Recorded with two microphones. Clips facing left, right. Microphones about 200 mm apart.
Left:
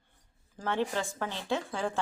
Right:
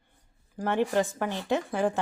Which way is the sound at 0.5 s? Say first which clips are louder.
Right 6 dB; 15° right (ahead or behind).